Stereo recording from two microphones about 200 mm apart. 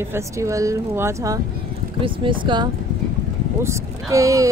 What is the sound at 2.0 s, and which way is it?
Speech, 25° right (ahead or behind).